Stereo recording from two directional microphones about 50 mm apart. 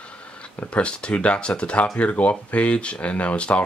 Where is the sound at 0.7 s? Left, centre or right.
Left.